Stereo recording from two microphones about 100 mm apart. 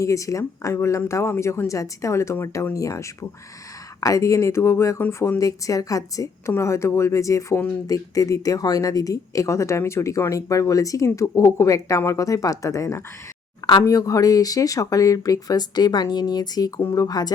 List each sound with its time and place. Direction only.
0.0 s speech: 30° left (ahead or behind)